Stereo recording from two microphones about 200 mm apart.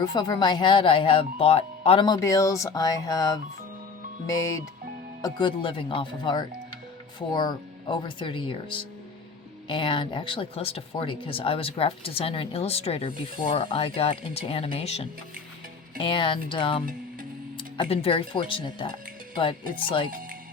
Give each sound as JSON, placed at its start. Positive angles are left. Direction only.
{"t": 0.0, "sound": "speech", "side_deg": 20}